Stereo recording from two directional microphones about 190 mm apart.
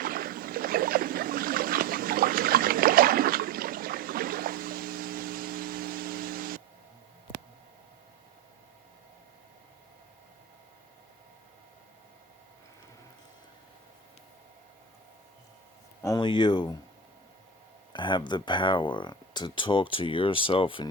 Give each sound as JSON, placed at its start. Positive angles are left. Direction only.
{"t": 0.0, "sound": "a sound", "side_deg": -50}
{"t": 16.0, "sound": "speech", "side_deg": 20}
{"t": 17.9, "sound": "speech", "side_deg": 25}